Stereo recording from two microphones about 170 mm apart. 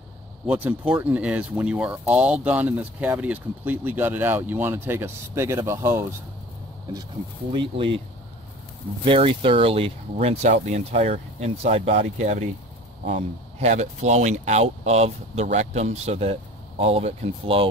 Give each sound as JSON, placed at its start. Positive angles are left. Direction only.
{"t": 0.5, "sound": "speech", "side_deg": -10}
{"t": 7.5, "sound": "speech", "side_deg": -30}
{"t": 9.0, "sound": "speech", "side_deg": -30}